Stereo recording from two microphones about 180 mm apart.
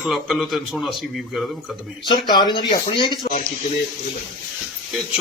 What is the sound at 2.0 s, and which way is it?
Speech, 25° left (ahead or behind).